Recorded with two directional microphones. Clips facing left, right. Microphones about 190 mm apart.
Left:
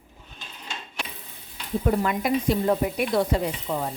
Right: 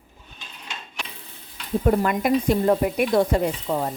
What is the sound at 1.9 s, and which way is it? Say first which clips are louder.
A woman's voice: right 3 dB; 45° right (ahead or behind).